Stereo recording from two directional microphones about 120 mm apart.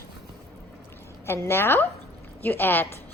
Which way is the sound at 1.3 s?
20° left (ahead or behind).